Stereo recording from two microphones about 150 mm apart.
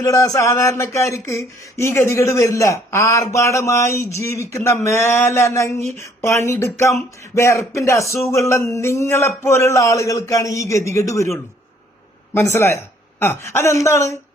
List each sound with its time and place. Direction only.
0.0 s a woman's voice: 20° left (ahead or behind)